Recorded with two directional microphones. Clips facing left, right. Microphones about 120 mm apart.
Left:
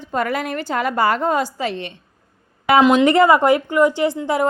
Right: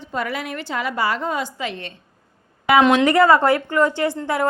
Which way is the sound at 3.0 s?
20° left (ahead or behind).